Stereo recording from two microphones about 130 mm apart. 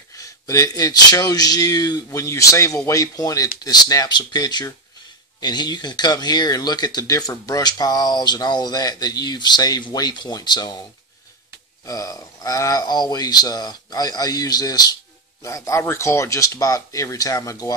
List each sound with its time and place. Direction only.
0.1 s speech: 25° left (ahead or behind)
11.8 s speech: 25° left (ahead or behind)